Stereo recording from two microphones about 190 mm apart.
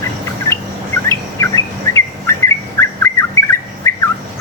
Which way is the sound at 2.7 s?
15° left (ahead or behind).